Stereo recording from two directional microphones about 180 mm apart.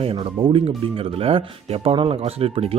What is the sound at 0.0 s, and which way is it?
Speech, 30° right (ahead or behind).